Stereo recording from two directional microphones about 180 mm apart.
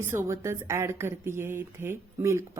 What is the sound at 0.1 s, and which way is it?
Speech, 15° right (ahead or behind).